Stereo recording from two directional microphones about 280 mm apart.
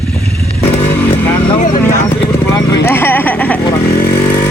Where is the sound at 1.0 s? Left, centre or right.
Centre.